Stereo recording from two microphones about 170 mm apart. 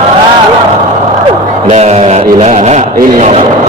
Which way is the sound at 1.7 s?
40° right (ahead or behind).